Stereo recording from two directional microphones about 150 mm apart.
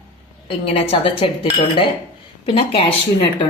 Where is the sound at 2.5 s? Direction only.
35° left (ahead or behind).